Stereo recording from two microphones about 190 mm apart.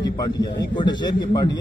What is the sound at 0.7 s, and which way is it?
Speech, 25° left (ahead or behind).